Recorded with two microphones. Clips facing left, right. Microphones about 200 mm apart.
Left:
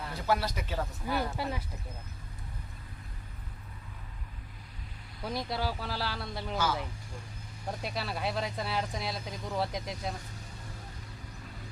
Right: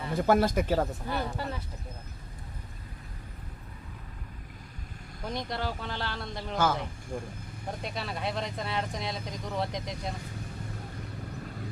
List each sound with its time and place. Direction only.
0.1 s speech: 50° right (ahead or behind)
1.0 s speech: 5° left (ahead or behind)
5.2 s speech: 5° left (ahead or behind)
6.6 s speech: 50° right (ahead or behind)
7.8 s speech: centre (ahead or behind)